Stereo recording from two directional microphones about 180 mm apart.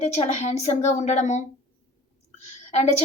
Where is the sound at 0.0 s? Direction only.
35° left (ahead or behind).